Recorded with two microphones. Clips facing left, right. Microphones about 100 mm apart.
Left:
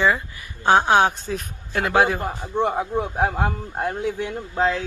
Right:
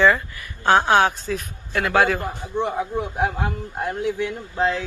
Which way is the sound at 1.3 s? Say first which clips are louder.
Right 1 dB; 35° left (ahead or behind).